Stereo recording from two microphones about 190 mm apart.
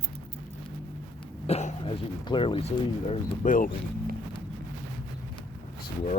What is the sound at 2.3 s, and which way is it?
Speech, 25° left (ahead or behind).